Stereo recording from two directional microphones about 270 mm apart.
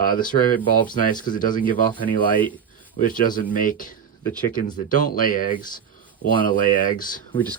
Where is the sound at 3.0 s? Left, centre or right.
Left.